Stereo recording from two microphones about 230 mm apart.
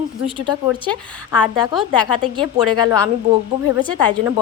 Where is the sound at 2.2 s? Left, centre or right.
Centre.